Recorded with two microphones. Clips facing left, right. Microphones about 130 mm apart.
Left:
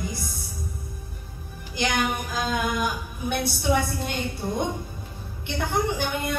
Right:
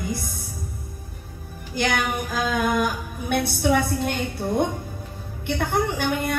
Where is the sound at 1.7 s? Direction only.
50° right (ahead or behind).